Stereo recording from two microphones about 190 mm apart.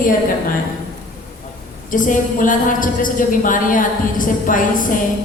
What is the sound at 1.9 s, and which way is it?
A woman's voice, 45° left (ahead or behind).